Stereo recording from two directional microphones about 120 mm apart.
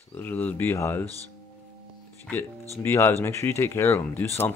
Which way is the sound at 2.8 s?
20° left (ahead or behind).